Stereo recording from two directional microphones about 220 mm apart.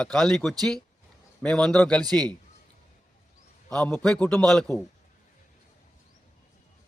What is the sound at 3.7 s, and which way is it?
Speech, 5° left (ahead or behind).